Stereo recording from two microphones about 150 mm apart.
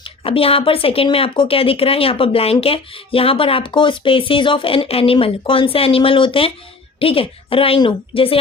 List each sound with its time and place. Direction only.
0.0 s speech: 40° left (ahead or behind)